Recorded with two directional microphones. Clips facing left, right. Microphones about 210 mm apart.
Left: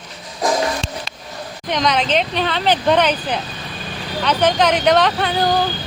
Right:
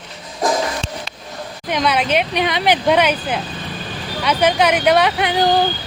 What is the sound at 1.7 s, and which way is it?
Speech, 5° right (ahead or behind).